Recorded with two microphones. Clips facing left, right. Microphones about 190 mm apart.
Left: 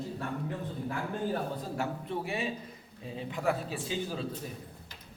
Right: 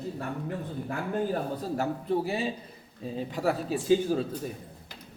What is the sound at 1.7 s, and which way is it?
A man's voice, 35° right (ahead or behind).